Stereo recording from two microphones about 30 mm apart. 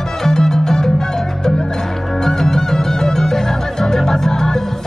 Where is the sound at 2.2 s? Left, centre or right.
Centre.